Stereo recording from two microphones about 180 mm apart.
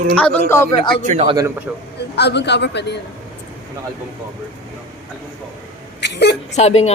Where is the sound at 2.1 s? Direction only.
70° left (ahead or behind).